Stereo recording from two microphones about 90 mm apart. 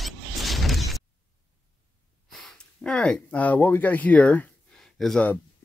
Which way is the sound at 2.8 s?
10° left (ahead or behind).